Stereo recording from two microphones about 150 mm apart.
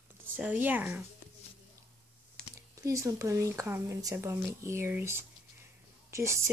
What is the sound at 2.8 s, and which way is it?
Speech, 20° right (ahead or behind).